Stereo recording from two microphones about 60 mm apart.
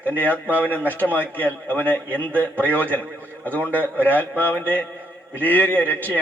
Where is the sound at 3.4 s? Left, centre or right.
Right.